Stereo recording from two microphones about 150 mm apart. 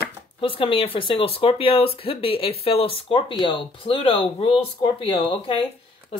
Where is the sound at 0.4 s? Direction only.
35° left (ahead or behind).